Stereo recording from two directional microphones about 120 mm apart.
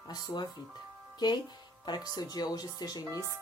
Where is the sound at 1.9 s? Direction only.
35° left (ahead or behind).